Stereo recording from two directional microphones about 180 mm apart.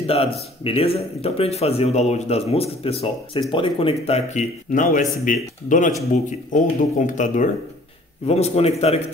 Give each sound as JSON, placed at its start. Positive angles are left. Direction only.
{"t": 0.0, "sound": "speech", "side_deg": 30}